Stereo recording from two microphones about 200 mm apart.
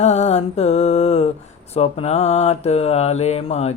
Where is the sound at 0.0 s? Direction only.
30° left (ahead or behind).